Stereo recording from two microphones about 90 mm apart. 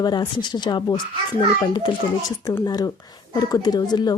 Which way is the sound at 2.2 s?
45° left (ahead or behind).